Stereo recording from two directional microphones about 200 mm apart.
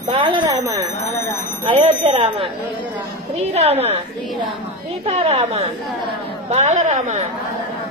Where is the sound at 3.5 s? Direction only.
30° right (ahead or behind).